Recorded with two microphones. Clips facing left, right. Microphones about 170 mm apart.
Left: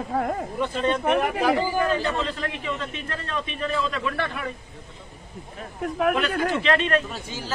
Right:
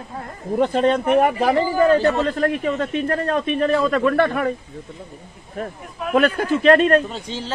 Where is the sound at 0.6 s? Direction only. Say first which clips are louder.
Right 8 dB; 45° right (ahead or behind).